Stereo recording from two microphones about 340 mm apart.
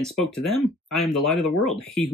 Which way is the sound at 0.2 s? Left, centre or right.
Centre.